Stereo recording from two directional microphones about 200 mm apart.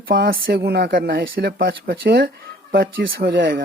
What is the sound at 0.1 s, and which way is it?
Speech, 50° right (ahead or behind).